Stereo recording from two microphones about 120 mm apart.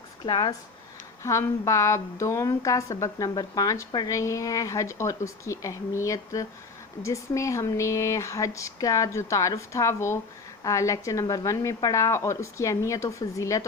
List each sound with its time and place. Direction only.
0.3 s speech: 35° left (ahead or behind)
1.2 s speech: 25° left (ahead or behind)